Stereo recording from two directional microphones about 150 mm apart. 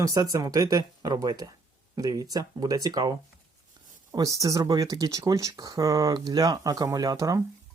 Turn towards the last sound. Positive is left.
turn(degrees=-25)  # may be behind; listen again after turning